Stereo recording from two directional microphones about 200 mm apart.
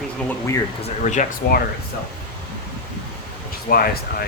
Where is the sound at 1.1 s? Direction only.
35° left (ahead or behind).